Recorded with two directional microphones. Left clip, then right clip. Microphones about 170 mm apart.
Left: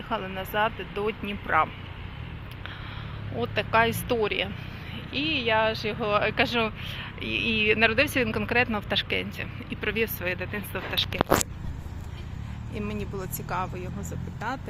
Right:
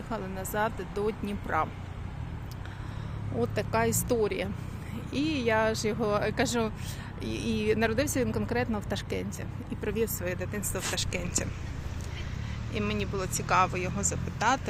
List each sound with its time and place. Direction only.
0.1 s speech: 20° right (ahead or behind)
1.5 s speech: 20° right (ahead or behind)
3.4 s speech: 35° right (ahead or behind)
5.1 s speech: 50° right (ahead or behind); by 11.2 s 15° right (ahead or behind)
12.7 s speech: 15° left (ahead or behind)
13.5 s speech: centre (ahead or behind)